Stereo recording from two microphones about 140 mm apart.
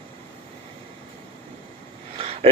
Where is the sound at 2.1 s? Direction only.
45° right (ahead or behind).